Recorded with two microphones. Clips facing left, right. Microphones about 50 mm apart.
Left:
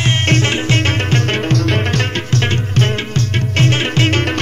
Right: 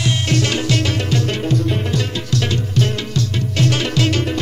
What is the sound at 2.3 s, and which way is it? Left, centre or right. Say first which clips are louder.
Music: left 1 dB; left.